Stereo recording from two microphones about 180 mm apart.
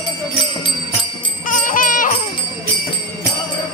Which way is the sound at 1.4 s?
50° left (ahead or behind).